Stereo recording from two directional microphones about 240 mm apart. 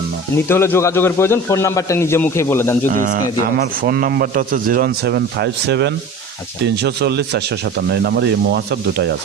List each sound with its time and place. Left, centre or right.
0.4 s a man's voice: centre
2.9 s a man's voice: right